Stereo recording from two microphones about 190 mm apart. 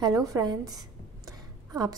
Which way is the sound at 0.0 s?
20° right (ahead or behind).